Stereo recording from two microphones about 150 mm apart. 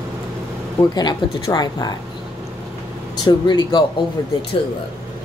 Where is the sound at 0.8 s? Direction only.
25° left (ahead or behind).